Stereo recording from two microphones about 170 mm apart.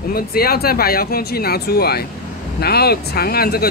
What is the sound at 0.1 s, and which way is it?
Speech, 65° left (ahead or behind).